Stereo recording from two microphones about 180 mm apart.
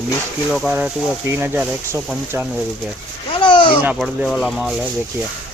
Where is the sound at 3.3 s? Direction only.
30° left (ahead or behind).